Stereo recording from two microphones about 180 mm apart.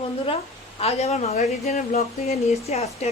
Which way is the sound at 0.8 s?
35° left (ahead or behind).